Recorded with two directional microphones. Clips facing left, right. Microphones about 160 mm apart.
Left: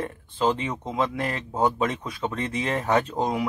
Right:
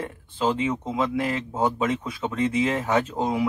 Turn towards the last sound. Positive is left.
turn(degrees=0)  # may be behind; listen again after turning